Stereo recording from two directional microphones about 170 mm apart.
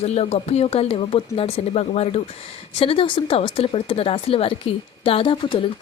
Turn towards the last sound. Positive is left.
turn(degrees=30)  # may be behind; listen again after turning